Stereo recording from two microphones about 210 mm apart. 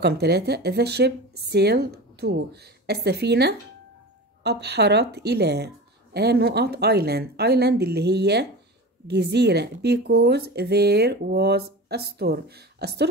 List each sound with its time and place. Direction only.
0.0 s speech: 50° right (ahead or behind)